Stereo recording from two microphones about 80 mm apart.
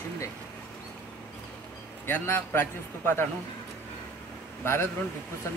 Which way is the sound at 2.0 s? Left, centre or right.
Left.